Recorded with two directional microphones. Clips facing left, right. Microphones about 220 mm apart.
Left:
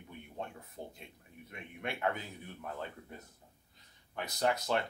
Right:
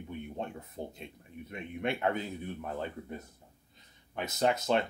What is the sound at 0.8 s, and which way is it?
Speech, 25° right (ahead or behind).